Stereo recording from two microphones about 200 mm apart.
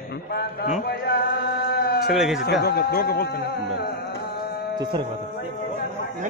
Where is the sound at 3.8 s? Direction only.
55° left (ahead or behind).